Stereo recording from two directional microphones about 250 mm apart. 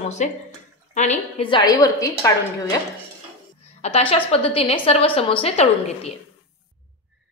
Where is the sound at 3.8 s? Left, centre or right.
Left.